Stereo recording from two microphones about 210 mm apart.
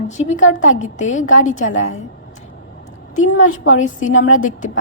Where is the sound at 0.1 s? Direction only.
35° left (ahead or behind).